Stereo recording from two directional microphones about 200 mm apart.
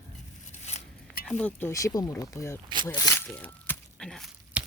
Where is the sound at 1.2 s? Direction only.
5° left (ahead or behind).